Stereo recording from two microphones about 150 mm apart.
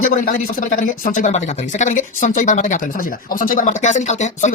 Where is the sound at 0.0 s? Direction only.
65° left (ahead or behind).